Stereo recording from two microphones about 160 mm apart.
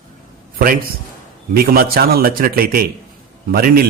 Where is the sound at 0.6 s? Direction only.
65° right (ahead or behind).